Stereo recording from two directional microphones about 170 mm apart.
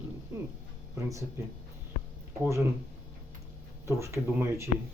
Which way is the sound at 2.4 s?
15° right (ahead or behind).